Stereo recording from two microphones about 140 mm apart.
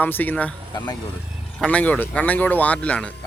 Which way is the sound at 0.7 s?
30° left (ahead or behind).